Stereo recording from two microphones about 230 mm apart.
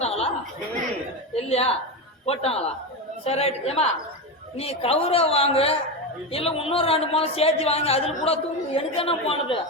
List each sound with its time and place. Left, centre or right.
0.0 s chuckle: left
1.4 s speech: left